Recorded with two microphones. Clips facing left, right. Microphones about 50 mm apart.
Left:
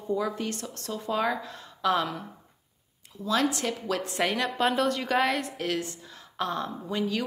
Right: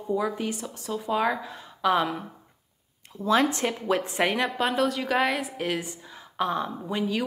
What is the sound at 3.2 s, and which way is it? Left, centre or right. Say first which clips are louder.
Speech: right 4 dB; right.